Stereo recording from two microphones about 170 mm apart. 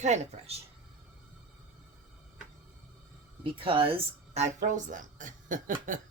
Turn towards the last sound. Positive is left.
turn(degrees=-50)  # may be behind; listen again after turning